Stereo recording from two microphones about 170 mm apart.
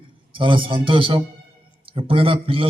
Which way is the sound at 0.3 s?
30° right (ahead or behind).